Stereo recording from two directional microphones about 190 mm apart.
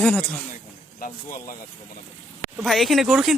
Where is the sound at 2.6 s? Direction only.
Centre (ahead or behind).